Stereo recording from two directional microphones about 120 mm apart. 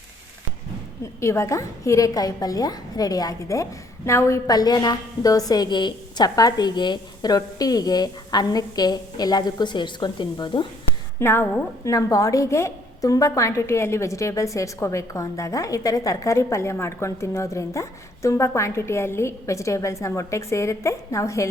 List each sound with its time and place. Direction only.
1.2 s a woman's voice: 25° left (ahead or behind); by 10.7 s 40° left (ahead or behind)
11.2 s a woman's voice: 20° left (ahead or behind)